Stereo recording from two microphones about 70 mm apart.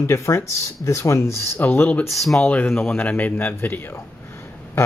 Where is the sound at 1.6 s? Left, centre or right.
Left.